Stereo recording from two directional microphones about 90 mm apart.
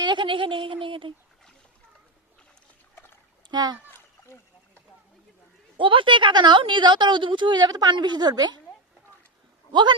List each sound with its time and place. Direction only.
0.0 s a sound: 60° right (ahead or behind)
2.9 s splash: 25° left (ahead or behind)
3.5 s a child's voice: 50° right (ahead or behind)
5.7 s a woman's voice: 70° right (ahead or behind); by 8.6 s 50° right (ahead or behind)